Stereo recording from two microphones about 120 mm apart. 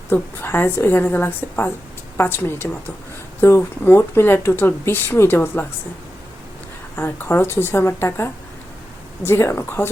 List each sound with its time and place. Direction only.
0.1 s a woman's voice: 20° left (ahead or behind)
6.9 s speech: 20° left (ahead or behind)